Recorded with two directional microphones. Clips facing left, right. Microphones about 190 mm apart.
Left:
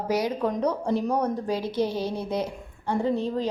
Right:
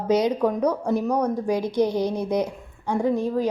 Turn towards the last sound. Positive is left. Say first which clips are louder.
# right 3 dB
turn(degrees=-10)  # may be behind; listen again after turning